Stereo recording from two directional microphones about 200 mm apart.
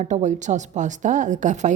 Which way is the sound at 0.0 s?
35° right (ahead or behind).